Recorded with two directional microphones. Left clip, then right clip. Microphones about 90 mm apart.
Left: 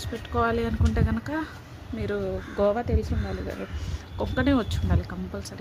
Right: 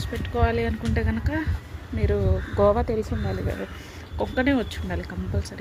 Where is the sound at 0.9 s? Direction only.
10° left (ahead or behind).